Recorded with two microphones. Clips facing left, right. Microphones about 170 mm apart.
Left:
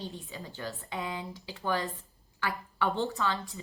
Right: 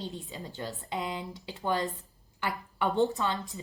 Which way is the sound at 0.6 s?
20° right (ahead or behind).